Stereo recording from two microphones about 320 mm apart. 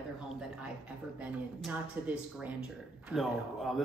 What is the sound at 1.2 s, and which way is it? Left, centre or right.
A man's voice, centre.